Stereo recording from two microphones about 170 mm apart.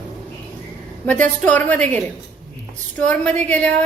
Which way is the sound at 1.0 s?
10° left (ahead or behind).